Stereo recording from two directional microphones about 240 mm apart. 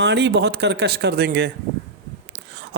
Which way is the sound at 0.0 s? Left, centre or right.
Right.